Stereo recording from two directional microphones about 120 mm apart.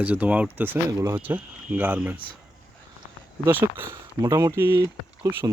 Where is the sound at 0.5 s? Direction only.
20° right (ahead or behind).